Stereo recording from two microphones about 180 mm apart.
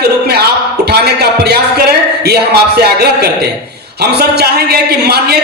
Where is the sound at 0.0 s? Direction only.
65° right (ahead or behind).